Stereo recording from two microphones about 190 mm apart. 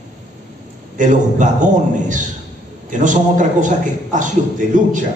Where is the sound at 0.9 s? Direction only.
40° right (ahead or behind).